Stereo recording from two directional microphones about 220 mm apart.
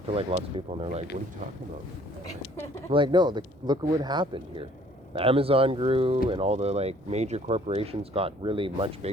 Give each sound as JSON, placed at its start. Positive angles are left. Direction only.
{"t": 0.1, "sound": "speech", "side_deg": -25}
{"t": 2.9, "sound": "speech", "side_deg": -20}